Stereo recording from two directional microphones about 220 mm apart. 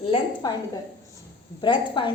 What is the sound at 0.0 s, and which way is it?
Speech, 25° left (ahead or behind).